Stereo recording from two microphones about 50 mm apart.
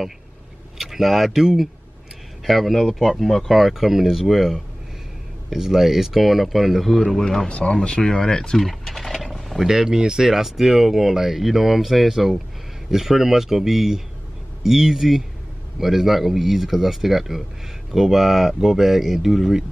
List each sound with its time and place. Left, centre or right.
0.7 s speech: centre
7.5 s speech: left; by 19.6 s centre